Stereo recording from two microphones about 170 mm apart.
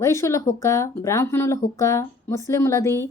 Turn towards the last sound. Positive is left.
turn(degrees=15)  # may be behind; listen again after turning